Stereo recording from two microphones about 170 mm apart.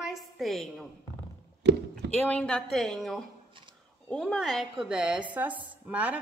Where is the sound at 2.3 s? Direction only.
5° left (ahead or behind).